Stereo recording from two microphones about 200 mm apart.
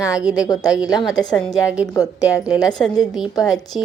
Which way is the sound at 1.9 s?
15° left (ahead or behind).